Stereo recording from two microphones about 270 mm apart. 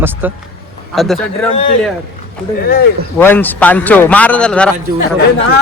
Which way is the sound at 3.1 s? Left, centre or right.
Centre.